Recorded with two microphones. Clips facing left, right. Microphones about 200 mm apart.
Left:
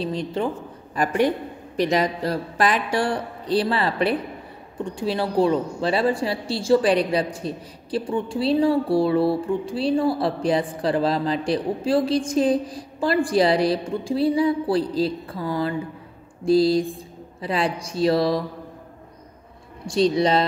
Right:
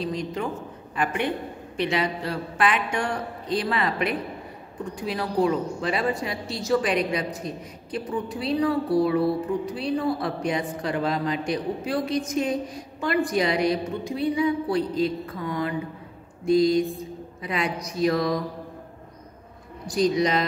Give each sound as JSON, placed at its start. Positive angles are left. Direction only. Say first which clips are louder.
{"t": 0.0, "sound": "a woman's voice", "louder": "left 3 dB", "side_deg": 30}
{"t": 19.9, "sound": "speech", "louder": "left 3 dB", "side_deg": 30}